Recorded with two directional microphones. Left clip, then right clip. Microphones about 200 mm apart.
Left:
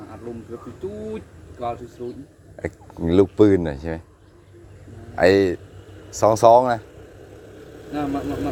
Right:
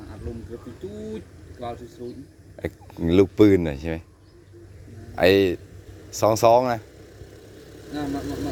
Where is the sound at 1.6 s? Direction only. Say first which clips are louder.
Left 5 dB; 10° left (ahead or behind).